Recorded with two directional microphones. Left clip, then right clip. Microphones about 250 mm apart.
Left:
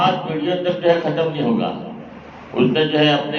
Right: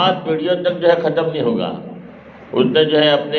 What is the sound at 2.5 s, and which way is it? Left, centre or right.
Speech, right.